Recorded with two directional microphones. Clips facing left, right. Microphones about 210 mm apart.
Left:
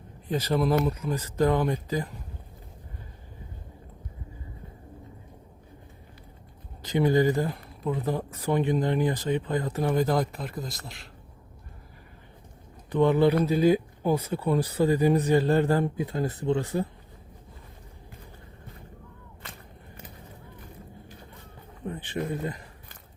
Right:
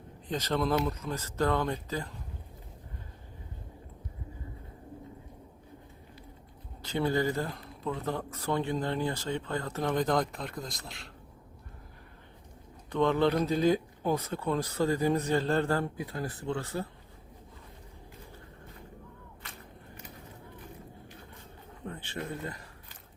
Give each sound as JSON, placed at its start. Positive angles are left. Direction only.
{"t": 0.3, "sound": "speech", "side_deg": 10}
{"t": 6.8, "sound": "speech", "side_deg": 15}
{"t": 12.9, "sound": "speech", "side_deg": 10}
{"t": 21.8, "sound": "a sound", "side_deg": 15}